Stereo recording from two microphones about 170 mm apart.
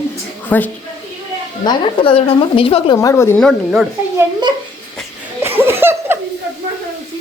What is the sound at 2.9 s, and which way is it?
Speech, 15° left (ahead or behind).